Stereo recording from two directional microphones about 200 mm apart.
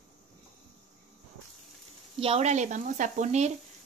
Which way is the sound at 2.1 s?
30° right (ahead or behind).